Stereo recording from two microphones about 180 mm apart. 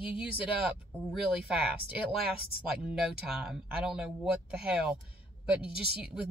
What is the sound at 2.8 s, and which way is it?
Speech, 5° right (ahead or behind).